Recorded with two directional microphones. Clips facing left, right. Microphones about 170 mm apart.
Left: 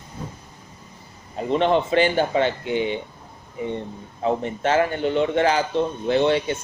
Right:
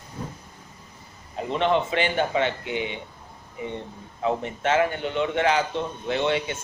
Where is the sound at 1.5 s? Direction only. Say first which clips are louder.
Left 4 dB; 35° left (ahead or behind).